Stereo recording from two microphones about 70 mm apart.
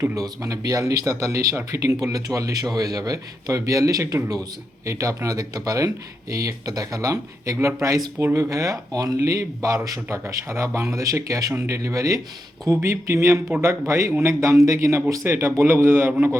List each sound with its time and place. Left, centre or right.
0.2 s speech: right
2.0 s speech: right
9.2 s speech: right
11.5 s a man's voice: right
11.8 s a man's voice: right